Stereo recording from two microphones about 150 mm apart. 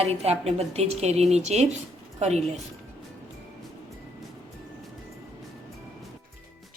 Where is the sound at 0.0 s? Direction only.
45° right (ahead or behind).